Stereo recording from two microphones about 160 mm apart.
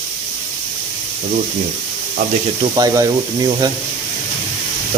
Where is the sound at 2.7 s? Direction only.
25° right (ahead or behind).